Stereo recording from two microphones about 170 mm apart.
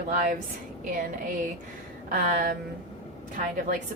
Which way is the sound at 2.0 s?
55° right (ahead or behind).